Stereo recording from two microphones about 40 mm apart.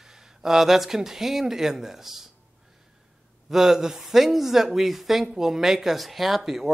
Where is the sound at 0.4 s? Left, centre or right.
Centre.